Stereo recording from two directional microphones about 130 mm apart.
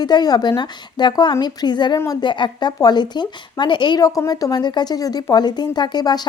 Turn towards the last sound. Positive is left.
turn(degrees=30)  # may be behind; listen again after turning